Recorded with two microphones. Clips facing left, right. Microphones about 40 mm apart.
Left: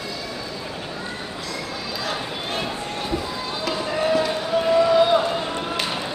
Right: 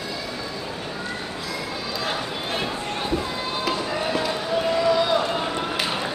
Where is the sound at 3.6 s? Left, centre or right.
Centre.